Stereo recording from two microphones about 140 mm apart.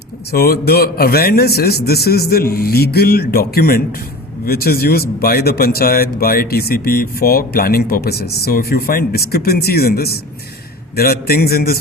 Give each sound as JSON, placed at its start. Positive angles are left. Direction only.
{"t": 0.3, "sound": "a man's voice", "side_deg": 90}